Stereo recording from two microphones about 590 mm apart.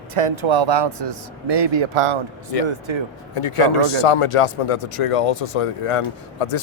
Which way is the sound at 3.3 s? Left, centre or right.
Left.